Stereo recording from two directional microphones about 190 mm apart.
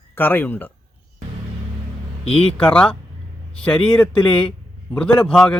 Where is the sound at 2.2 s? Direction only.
30° left (ahead or behind).